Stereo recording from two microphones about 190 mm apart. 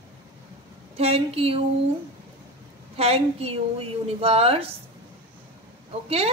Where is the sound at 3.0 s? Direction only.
30° right (ahead or behind).